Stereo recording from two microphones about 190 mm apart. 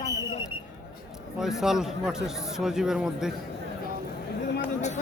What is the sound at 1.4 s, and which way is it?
A man's voice, centre (ahead or behind).